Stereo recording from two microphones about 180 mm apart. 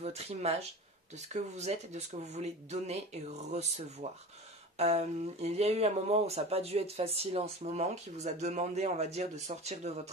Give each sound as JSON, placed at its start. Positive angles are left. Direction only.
{"t": 0.0, "sound": "speech", "side_deg": -35}